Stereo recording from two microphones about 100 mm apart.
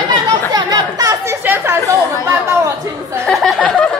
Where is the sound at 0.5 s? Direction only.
40° right (ahead or behind).